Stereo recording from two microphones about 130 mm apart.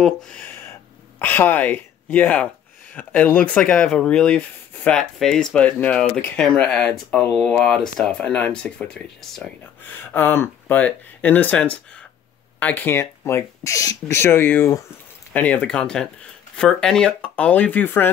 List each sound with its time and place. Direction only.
0.0 s speech: 5° left (ahead or behind)
9.8 s speech: 15° left (ahead or behind)